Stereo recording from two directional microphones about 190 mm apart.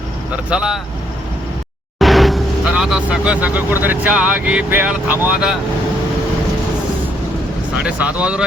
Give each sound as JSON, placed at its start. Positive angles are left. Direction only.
{"t": 0.5, "sound": "speech", "side_deg": -5}
{"t": 2.0, "sound": "speech", "side_deg": 0}
{"t": 7.8, "sound": "speech", "side_deg": -5}